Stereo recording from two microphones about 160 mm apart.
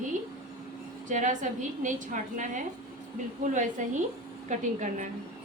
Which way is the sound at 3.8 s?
50° right (ahead or behind).